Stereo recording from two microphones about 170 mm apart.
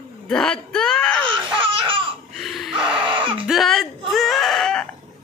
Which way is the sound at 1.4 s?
30° right (ahead or behind).